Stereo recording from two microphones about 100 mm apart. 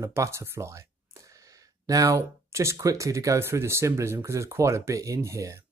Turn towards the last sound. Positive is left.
turn(degrees=-30)  # may be behind; listen again after turning